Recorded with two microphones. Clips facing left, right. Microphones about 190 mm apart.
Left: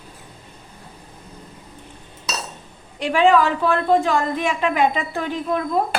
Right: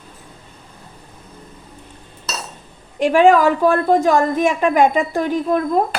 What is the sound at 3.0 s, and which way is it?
A woman's voice, 45° right (ahead or behind).